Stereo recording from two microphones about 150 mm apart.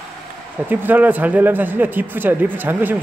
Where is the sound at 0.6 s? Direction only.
10° right (ahead or behind).